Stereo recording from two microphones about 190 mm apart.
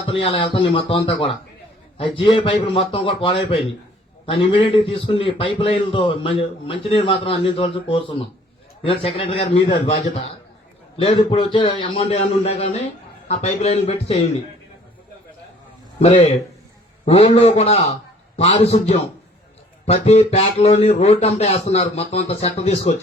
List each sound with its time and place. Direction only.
0.0 s a man's voice: 30° left (ahead or behind)
16.0 s speech: 30° left (ahead or behind)